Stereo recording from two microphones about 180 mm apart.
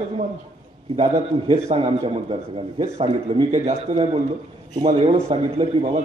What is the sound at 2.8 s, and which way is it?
A man's voice, 30° right (ahead or behind).